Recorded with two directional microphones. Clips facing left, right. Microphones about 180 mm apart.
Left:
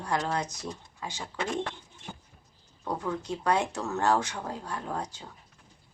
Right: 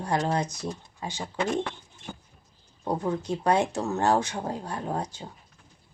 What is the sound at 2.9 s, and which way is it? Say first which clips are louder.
Speech: right 4 dB; 30° right (ahead or behind).